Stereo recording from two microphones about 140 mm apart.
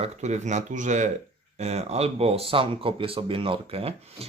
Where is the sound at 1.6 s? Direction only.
50° right (ahead or behind).